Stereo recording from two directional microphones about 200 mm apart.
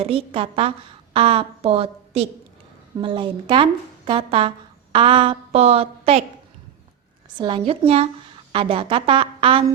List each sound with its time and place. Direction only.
0.0 s a woman's voice: 30° right (ahead or behind)
7.3 s speech: 25° right (ahead or behind)